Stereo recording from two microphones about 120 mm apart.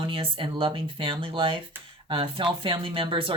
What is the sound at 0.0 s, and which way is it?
Speech, 45° right (ahead or behind).